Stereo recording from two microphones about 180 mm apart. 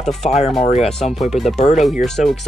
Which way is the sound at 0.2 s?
40° left (ahead or behind).